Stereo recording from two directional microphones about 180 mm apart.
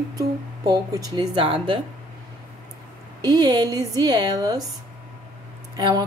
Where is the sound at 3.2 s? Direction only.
20° right (ahead or behind).